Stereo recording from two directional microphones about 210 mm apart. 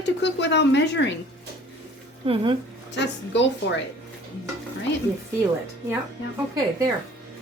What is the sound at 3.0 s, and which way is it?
Speech, 55° left (ahead or behind).